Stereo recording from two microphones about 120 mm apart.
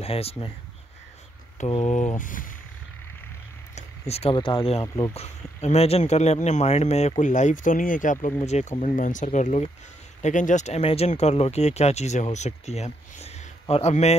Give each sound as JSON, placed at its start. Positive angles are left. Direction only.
{"t": 0.0, "sound": "speech", "side_deg": 55}
{"t": 1.8, "sound": "speech", "side_deg": 80}
{"t": 3.7, "sound": "speech", "side_deg": 65}
{"t": 4.8, "sound": "speech", "side_deg": 30}
{"t": 5.1, "sound": "speech", "side_deg": 65}
{"t": 8.5, "sound": "speech", "side_deg": 70}
{"t": 10.2, "sound": "speech", "side_deg": 90}